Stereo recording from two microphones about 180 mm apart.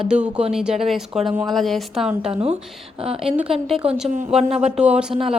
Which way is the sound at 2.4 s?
30° right (ahead or behind).